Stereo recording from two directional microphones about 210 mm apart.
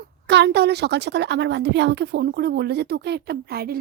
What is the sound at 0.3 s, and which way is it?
A woman's voice, 55° right (ahead or behind).